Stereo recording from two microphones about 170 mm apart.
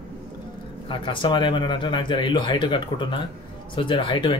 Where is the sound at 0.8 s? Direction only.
30° left (ahead or behind).